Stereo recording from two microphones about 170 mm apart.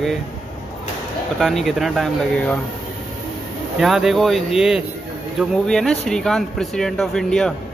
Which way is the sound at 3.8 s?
Centre (ahead or behind).